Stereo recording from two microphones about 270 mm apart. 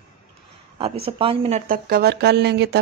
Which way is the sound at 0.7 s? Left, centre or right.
Right.